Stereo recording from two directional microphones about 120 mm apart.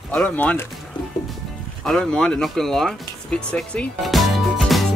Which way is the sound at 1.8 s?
5° left (ahead or behind).